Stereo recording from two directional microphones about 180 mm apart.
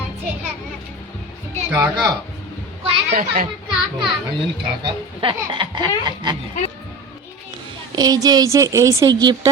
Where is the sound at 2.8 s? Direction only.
35° right (ahead or behind).